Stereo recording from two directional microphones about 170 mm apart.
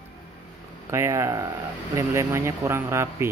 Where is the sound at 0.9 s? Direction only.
15° right (ahead or behind).